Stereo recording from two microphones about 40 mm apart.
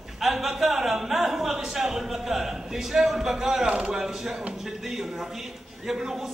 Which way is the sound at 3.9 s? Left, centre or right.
Centre.